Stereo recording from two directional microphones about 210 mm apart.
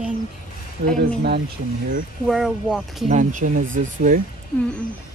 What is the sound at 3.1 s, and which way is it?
Speech, 40° right (ahead or behind).